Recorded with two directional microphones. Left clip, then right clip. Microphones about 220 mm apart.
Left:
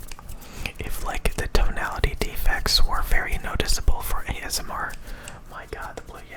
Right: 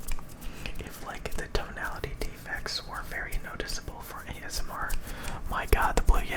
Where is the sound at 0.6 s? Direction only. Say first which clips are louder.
Left 8 dB; 30° left (ahead or behind).